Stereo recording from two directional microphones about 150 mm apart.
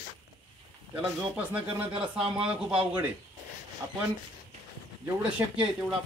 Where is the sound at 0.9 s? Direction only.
10° right (ahead or behind).